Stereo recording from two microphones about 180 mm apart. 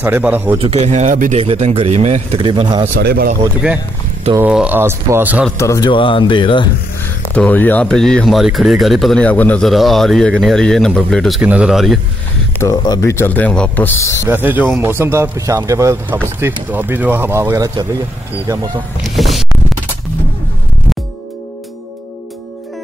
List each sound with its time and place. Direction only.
0.0 s speech: 10° right (ahead or behind)
0.6 s speech: 35° right (ahead or behind)
2.4 s speech: 25° right (ahead or behind)
3.0 s speech: 60° right (ahead or behind)
4.4 s speech: 5° right (ahead or behind)
5.6 s speech: 15° left (ahead or behind)
5.9 s speech: 30° left (ahead or behind)
7.3 s speech: 10° left (ahead or behind)
12.5 s speech: 20° left (ahead or behind)
14.2 s speech: 10° right (ahead or behind)
19.0 s speech: centre (ahead or behind)